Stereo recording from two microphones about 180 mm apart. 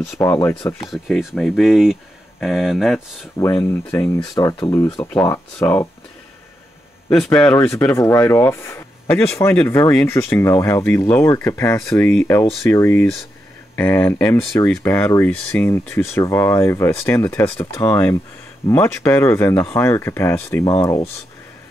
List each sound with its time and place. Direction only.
0.0 s speech: 10° left (ahead or behind)
0.8 s speech: centre (ahead or behind)
3.3 s speech: 15° left (ahead or behind)
7.3 s speech: 5° left (ahead or behind)
7.9 s speech: 15° left (ahead or behind)
11.9 s speech: 5° left (ahead or behind)